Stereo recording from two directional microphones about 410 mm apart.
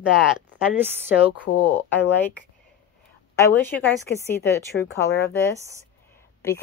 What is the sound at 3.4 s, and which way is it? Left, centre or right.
Speech, centre.